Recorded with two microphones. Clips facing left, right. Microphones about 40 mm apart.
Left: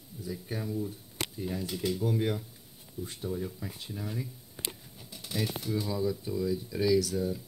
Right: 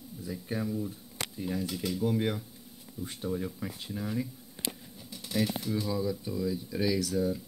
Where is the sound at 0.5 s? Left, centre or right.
Centre.